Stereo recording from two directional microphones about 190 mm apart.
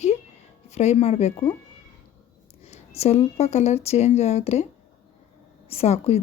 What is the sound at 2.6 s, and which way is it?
Speech, 35° left (ahead or behind).